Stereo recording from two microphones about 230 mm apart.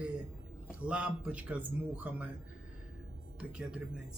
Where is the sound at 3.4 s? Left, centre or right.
Centre.